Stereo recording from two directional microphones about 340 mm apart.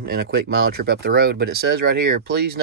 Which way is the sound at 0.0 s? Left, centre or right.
Right.